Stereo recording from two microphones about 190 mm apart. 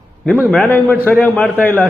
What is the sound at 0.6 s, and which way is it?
Speech, 10° left (ahead or behind).